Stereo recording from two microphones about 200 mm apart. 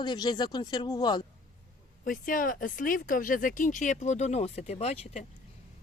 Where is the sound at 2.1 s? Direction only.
45° left (ahead or behind).